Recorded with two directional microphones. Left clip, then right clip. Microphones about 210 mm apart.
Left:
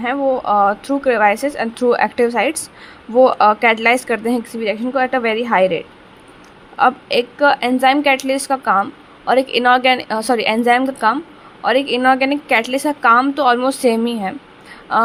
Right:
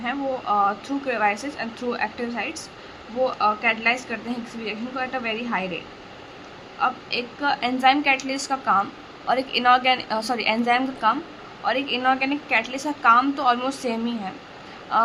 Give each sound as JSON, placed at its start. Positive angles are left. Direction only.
{"t": 0.0, "sound": "a woman's voice", "side_deg": 40}